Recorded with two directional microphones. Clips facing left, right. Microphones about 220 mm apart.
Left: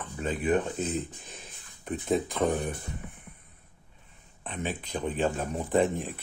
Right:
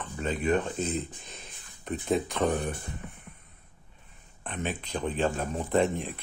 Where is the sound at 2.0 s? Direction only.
Centre (ahead or behind).